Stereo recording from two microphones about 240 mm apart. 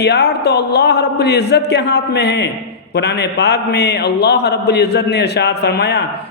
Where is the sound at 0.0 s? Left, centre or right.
Left.